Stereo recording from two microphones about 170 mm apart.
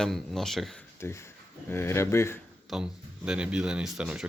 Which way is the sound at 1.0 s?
15° left (ahead or behind).